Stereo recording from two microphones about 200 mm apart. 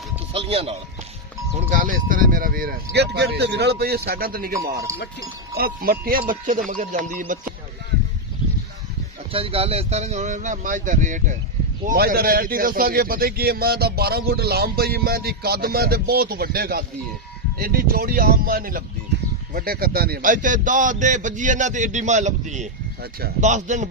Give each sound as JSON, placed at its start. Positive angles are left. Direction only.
{"t": 0.3, "sound": "a sound", "side_deg": -30}
{"t": 1.7, "sound": "speech", "side_deg": -40}
{"t": 4.8, "sound": "speech", "side_deg": -15}
{"t": 5.6, "sound": "a man's voice", "side_deg": -45}
{"t": 9.3, "sound": "a man's voice", "side_deg": -30}